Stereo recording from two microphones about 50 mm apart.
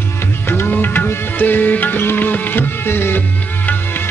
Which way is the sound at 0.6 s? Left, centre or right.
Left.